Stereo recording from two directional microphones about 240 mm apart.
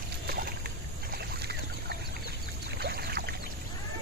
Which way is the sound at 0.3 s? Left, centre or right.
Right.